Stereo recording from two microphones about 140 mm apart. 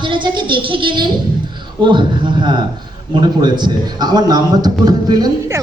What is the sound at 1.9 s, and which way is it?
A man's voice, 35° right (ahead or behind).